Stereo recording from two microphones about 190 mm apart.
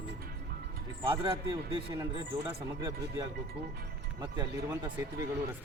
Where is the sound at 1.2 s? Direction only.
25° right (ahead or behind).